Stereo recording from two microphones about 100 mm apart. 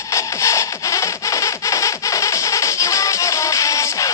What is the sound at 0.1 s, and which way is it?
Music, 30° left (ahead or behind).